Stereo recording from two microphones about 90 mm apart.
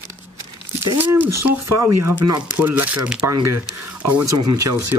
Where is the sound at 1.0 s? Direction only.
25° right (ahead or behind).